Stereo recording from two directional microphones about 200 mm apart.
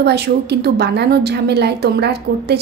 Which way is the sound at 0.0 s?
55° right (ahead or behind).